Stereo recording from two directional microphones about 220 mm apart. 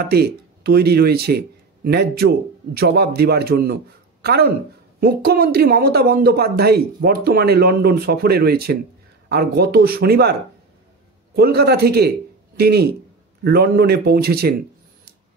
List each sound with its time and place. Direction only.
0.0 s speech: 45° right (ahead or behind)
11.3 s speech: 45° right (ahead or behind)